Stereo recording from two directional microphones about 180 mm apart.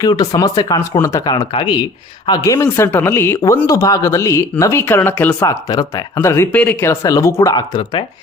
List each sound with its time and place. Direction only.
0.0 s speech: 20° left (ahead or behind)